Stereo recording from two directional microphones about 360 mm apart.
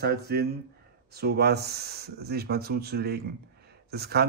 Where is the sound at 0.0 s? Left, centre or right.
Right.